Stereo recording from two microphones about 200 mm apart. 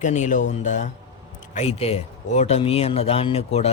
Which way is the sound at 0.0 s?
35° left (ahead or behind).